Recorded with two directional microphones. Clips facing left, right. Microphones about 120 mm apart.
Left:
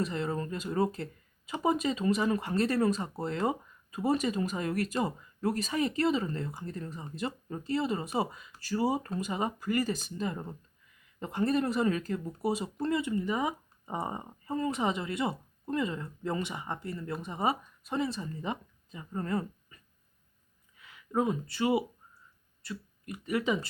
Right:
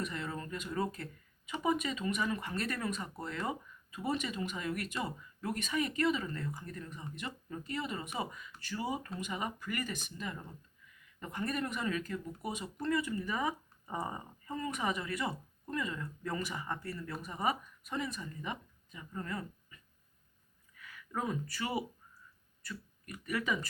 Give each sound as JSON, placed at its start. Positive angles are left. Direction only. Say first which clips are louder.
{"t": 0.0, "sound": "speech", "louder": "left 7 dB", "side_deg": 30}
{"t": 20.7, "sound": "speech", "louder": "left 9 dB", "side_deg": 25}